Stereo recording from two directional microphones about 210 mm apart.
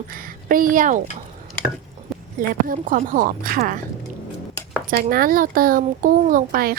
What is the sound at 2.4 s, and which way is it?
Speech, 40° right (ahead or behind).